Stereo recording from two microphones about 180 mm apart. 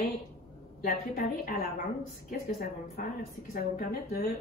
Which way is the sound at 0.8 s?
55° left (ahead or behind).